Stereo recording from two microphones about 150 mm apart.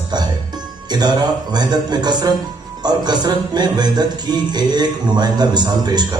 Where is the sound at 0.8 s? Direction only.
25° right (ahead or behind).